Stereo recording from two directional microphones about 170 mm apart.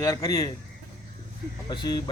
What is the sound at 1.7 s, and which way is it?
Speech, 25° left (ahead or behind).